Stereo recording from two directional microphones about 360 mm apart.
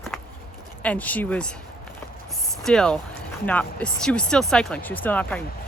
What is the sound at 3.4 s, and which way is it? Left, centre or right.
Speech, centre.